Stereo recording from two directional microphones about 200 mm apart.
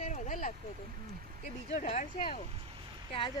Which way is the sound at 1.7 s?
35° left (ahead or behind).